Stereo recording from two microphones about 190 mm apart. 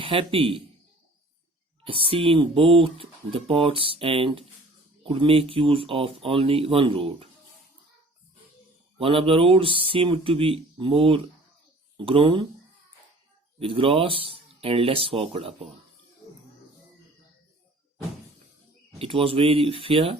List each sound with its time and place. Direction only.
0.0 s speech: 30° right (ahead or behind)
1.8 s speech: 30° right (ahead or behind)
9.0 s speech: 30° right (ahead or behind)
13.6 s speech: 30° right (ahead or behind)
18.9 s speech: 30° right (ahead or behind)